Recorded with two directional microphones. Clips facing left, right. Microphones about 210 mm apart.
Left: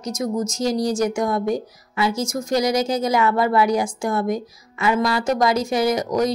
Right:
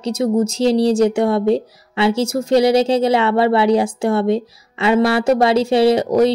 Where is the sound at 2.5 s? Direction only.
30° right (ahead or behind).